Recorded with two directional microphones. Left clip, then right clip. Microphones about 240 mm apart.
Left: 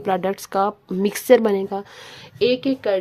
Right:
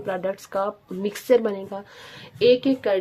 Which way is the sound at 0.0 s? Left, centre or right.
Left.